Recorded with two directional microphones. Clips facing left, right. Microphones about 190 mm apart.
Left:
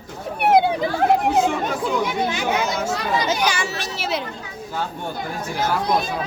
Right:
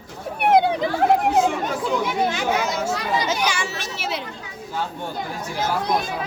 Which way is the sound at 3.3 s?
40° left (ahead or behind).